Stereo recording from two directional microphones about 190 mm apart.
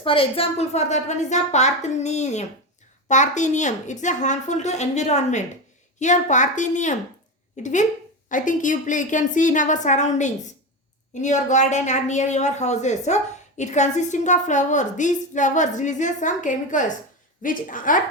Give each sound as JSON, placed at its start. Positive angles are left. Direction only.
{"t": 0.0, "sound": "a woman's voice", "side_deg": 30}